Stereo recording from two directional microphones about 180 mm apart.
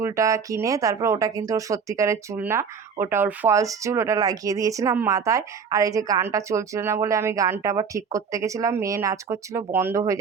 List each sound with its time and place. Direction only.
0.0 s speech: 15° right (ahead or behind)